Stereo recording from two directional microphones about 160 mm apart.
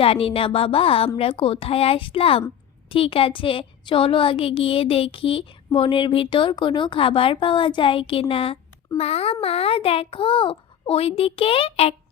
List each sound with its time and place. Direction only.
0.0 s a woman's voice: 35° left (ahead or behind)